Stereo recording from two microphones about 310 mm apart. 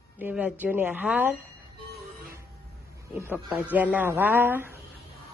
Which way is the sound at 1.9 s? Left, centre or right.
Right.